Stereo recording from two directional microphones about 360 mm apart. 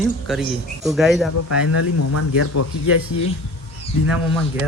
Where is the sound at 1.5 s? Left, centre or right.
Left.